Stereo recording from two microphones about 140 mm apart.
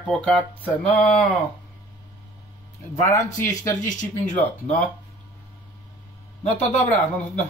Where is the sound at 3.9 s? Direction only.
65° left (ahead or behind).